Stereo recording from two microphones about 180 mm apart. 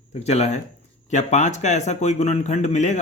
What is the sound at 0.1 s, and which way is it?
Speech, 35° left (ahead or behind).